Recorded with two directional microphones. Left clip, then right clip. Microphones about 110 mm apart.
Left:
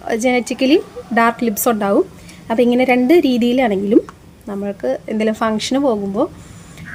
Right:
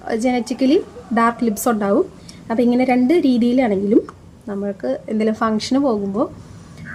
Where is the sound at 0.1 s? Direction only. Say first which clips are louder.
Left 3 dB; 10° right (ahead or behind).